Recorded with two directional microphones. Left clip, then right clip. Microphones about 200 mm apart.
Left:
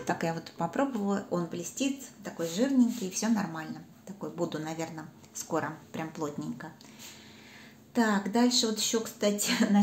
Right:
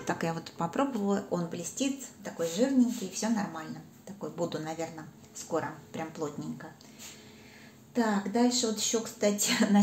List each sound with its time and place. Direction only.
0.0 s a woman's voice: centre (ahead or behind)
7.9 s a woman's voice: 15° left (ahead or behind)
9.4 s speech: centre (ahead or behind)